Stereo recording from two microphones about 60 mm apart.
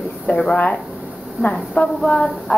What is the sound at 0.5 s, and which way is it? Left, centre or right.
A woman's voice, left.